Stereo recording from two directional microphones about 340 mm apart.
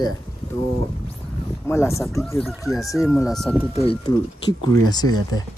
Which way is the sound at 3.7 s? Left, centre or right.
Centre.